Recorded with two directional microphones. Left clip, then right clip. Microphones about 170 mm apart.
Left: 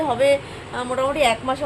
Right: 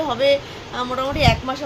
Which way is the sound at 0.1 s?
10° left (ahead or behind).